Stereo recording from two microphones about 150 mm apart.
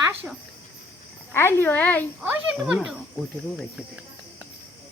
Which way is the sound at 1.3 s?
15° left (ahead or behind).